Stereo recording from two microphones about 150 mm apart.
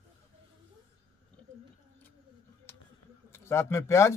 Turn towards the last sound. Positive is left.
turn(degrees=20)  # may be behind; listen again after turning